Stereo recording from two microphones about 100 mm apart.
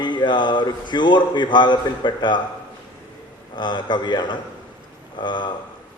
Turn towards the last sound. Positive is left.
turn(degrees=50)  # may be behind; listen again after turning